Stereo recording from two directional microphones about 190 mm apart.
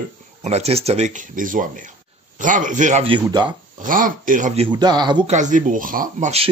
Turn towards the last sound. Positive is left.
turn(degrees=-35)  # may be behind; listen again after turning